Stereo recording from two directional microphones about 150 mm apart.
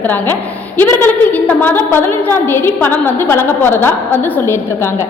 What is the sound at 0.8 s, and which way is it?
A woman's voice, 15° left (ahead or behind).